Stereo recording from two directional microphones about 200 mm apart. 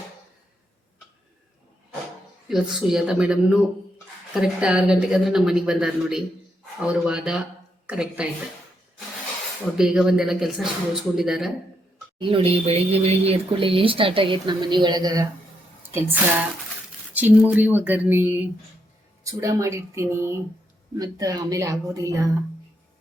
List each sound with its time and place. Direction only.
2.5 s speech: centre (ahead or behind)
9.7 s speech: 5° right (ahead or behind)
12.2 s speech: 25° right (ahead or behind)